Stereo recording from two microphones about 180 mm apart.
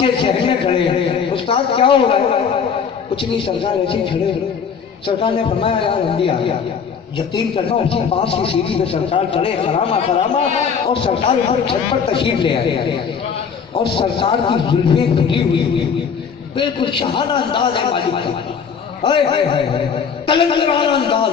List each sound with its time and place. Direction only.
0.0 s a sound: 30° left (ahead or behind)
3.2 s speech: 30° left (ahead or behind)
5.6 s speech: 30° left (ahead or behind)
13.9 s speech: 30° left (ahead or behind)